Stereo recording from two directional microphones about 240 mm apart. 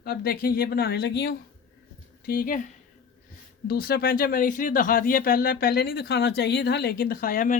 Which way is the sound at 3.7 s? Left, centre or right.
Left.